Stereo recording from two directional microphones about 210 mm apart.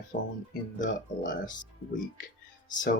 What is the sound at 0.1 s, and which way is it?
Speech, 35° left (ahead or behind).